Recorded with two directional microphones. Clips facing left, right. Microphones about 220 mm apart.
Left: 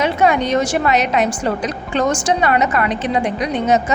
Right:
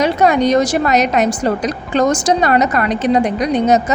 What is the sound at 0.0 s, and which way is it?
A woman's voice, 40° right (ahead or behind).